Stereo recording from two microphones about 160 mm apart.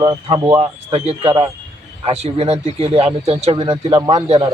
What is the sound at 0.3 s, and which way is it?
Speech, 25° right (ahead or behind).